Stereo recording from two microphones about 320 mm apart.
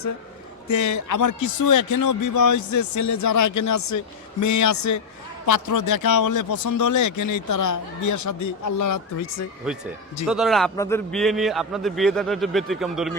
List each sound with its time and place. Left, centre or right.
0.7 s a man's voice: left
10.2 s a man's voice: centre